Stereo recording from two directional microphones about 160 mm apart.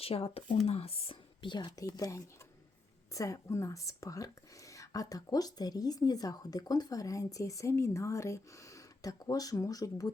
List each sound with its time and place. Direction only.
0.0 s speech: 35° left (ahead or behind); by 10.1 s 20° left (ahead or behind)